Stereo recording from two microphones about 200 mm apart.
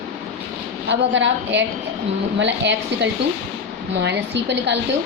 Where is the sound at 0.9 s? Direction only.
65° right (ahead or behind).